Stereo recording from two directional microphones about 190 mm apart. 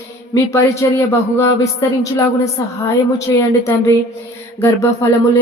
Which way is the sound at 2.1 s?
15° left (ahead or behind).